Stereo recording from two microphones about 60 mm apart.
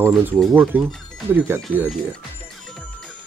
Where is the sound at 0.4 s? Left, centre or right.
Centre.